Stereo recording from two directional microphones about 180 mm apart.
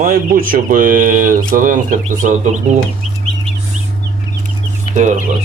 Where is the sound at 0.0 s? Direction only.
55° right (ahead or behind).